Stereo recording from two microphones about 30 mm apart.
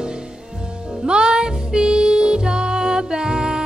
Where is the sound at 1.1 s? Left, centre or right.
Right.